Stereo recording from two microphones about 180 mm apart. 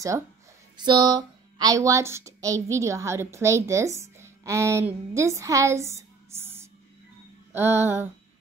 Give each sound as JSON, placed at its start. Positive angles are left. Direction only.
{"t": 0.7, "sound": "speech", "side_deg": -25}
{"t": 6.4, "sound": "music", "side_deg": -15}
{"t": 7.5, "sound": "speech", "side_deg": -15}